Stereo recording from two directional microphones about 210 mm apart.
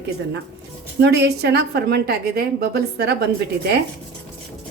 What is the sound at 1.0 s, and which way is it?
A woman's voice, 50° right (ahead or behind).